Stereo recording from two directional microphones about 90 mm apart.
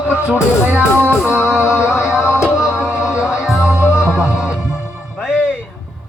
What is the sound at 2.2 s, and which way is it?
Music, 30° left (ahead or behind).